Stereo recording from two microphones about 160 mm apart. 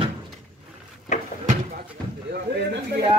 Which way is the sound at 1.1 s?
50° left (ahead or behind).